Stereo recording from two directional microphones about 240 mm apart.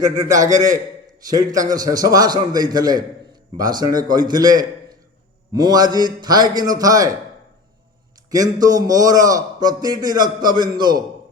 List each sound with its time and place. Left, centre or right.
0.0 s a man's voice: centre
8.3 s a man's voice: centre